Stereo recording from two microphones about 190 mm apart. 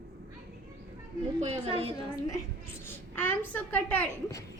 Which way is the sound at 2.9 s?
10° left (ahead or behind).